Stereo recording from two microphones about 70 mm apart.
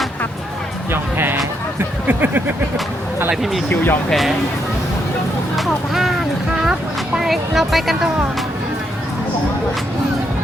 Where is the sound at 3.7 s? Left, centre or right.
Left.